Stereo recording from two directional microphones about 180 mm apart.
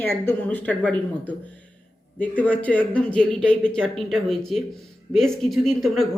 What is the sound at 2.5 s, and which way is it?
Speech, 10° left (ahead or behind).